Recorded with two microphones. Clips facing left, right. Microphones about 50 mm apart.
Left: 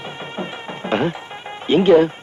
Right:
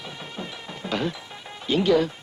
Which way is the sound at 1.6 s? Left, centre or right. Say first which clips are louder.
Left 8 dB; left.